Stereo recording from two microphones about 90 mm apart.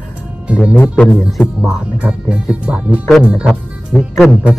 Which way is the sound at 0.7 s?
20° left (ahead or behind).